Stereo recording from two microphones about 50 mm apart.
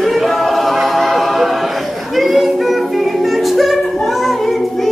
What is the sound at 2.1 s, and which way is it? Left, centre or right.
Music, centre.